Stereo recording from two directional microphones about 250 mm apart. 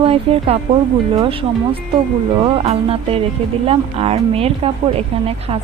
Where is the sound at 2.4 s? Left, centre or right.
Right.